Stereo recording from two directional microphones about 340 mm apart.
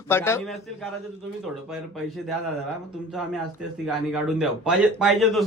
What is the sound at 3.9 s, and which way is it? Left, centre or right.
Speech, centre.